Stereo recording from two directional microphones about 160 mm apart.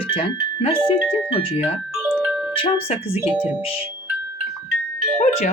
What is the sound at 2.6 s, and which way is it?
Speech, 35° left (ahead or behind).